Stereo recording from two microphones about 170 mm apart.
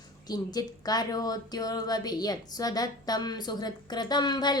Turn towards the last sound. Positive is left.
turn(degrees=25)  # may be behind; listen again after turning